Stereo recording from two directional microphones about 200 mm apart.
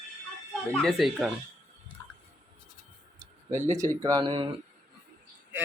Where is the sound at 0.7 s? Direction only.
5° left (ahead or behind).